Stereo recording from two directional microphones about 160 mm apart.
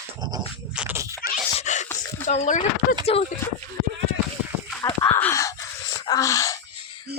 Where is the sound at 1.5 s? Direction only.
50° left (ahead or behind).